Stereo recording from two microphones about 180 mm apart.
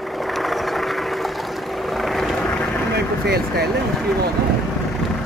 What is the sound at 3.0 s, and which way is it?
Vehicle, 60° right (ahead or behind).